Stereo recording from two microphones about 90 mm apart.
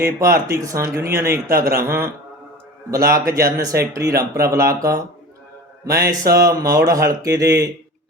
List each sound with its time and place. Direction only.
0.2 s speech: 35° right (ahead or behind)